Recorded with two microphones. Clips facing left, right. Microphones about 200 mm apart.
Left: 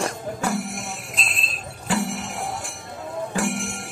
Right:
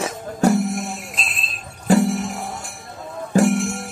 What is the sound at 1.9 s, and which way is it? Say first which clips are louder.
Music: right 9 dB; 40° right (ahead or behind).